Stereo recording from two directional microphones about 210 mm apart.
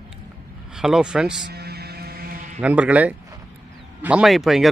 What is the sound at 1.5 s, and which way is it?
Hum, 50° right (ahead or behind).